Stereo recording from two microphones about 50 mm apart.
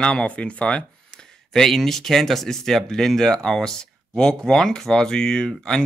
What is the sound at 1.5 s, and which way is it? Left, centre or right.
Speech, centre.